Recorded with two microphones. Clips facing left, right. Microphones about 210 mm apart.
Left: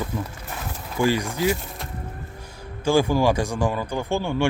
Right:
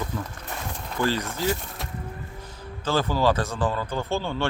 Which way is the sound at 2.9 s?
10° left (ahead or behind).